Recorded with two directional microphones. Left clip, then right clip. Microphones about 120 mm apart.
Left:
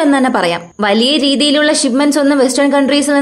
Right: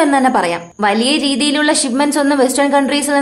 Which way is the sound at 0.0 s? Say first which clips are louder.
Even; 30° left (ahead or behind).